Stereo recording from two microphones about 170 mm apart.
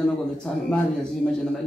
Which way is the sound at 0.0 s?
5° left (ahead or behind).